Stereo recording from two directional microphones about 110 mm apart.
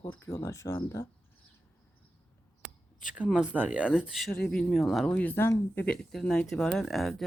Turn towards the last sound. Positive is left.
turn(degrees=0)  # may be behind; listen again after turning